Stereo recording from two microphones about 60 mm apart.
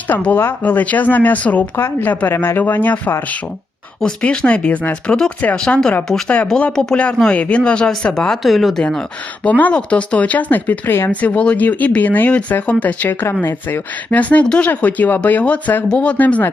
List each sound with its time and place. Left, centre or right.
0.3 s speech: left
1.7 s speech: left
4.0 s speech: centre
5.5 s speech: centre
6.7 s speech: centre
7.2 s speech: centre
8.4 s speech: centre
9.4 s speech: left
11.1 s speech: left
13.1 s speech: left
14.1 s speech: left